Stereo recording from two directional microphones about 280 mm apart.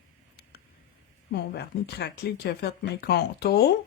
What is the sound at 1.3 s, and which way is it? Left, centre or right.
Speech, left.